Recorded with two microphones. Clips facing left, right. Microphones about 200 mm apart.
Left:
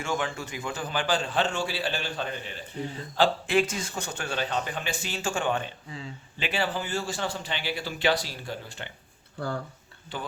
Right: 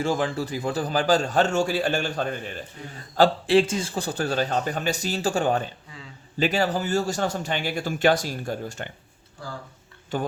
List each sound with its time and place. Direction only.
0.0 s a man's voice: 35° right (ahead or behind)
3.2 s a man's voice: 30° right (ahead or behind)
10.1 s a man's voice: 45° right (ahead or behind)